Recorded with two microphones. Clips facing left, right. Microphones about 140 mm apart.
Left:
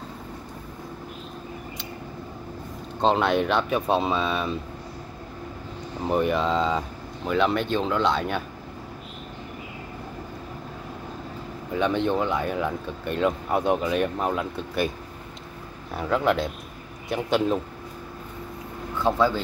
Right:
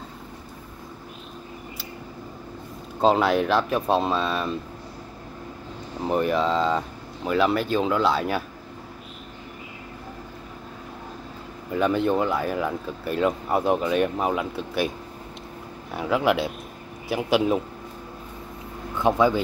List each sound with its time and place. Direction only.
3.0 s speech: 5° right (ahead or behind)
6.0 s speech: centre (ahead or behind)
11.7 s speech: 5° right (ahead or behind)
15.9 s speech: 5° right (ahead or behind)
18.9 s speech: 15° right (ahead or behind)